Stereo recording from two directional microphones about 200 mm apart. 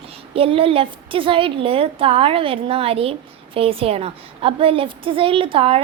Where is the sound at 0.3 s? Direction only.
25° right (ahead or behind).